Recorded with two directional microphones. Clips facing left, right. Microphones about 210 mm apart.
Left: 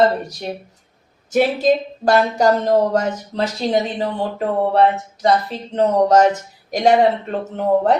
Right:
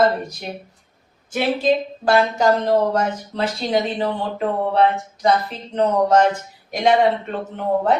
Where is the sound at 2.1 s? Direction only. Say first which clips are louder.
Left 2 dB; 40° left (ahead or behind).